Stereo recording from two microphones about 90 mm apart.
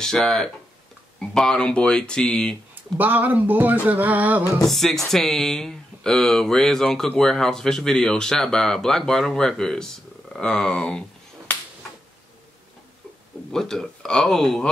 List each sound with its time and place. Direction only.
0.0 s speech: 5° left (ahead or behind)
2.7 s speech: 20° right (ahead or behind)
3.8 s music: 20° right (ahead or behind)
4.6 s speech: centre (ahead or behind)
13.5 s speech: 5° left (ahead or behind)